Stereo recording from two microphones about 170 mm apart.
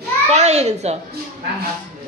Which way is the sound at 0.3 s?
40° right (ahead or behind).